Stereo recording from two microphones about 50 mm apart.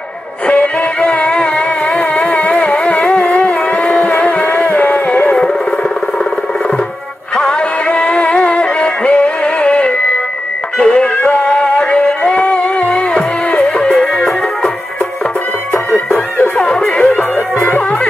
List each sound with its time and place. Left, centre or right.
0.5 s music: left
7.3 s music: centre
16.5 s music: centre